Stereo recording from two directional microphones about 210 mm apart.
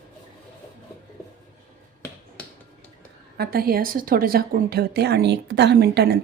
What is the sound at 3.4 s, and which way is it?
A woman's voice, 45° right (ahead or behind).